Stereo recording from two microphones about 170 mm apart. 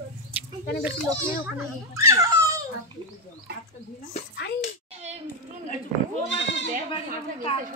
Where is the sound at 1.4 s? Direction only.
15° right (ahead or behind).